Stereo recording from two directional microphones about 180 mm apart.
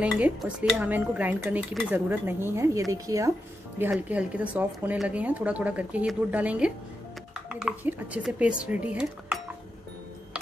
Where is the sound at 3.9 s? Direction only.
5° right (ahead or behind).